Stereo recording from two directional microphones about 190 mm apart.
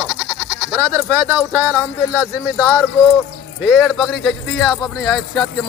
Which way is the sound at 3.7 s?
Centre (ahead or behind).